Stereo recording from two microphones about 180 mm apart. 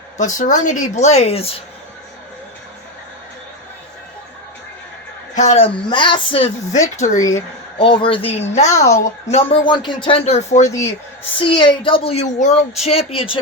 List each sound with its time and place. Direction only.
0.2 s speech: 45° left (ahead or behind)
5.4 s speech: 35° left (ahead or behind)
7.2 s speech: 20° left (ahead or behind); by 10.7 s 40° left (ahead or behind)
11.3 s speech: 25° left (ahead or behind)